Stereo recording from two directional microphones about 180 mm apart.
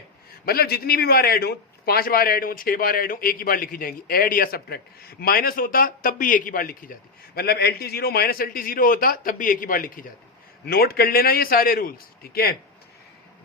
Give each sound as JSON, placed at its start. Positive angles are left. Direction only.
{"t": 0.4, "sound": "a man's voice", "side_deg": 60}